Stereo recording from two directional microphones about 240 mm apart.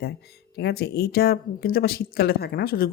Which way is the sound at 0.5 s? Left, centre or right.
Left.